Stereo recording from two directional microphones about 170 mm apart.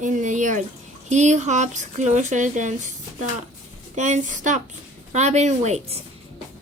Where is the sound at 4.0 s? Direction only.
45° right (ahead or behind).